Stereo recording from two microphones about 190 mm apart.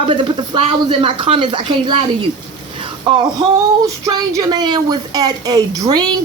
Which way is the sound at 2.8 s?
25° right (ahead or behind).